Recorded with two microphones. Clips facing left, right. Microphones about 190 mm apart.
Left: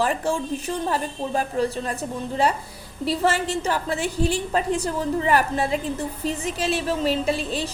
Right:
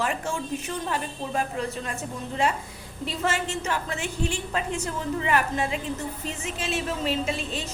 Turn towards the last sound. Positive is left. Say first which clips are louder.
# left 5 dB
turn(degrees=35)  # may be behind; listen again after turning